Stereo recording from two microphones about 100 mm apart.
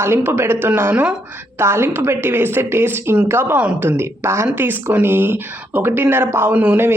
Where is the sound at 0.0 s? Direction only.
25° right (ahead or behind).